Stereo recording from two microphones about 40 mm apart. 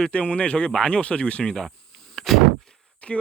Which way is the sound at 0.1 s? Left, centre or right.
Left.